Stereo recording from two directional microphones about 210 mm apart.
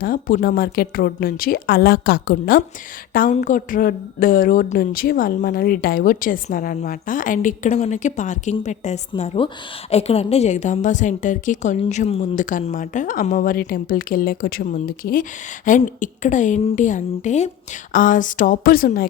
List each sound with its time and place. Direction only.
0.0 s a woman's voice: 40° left (ahead or behind)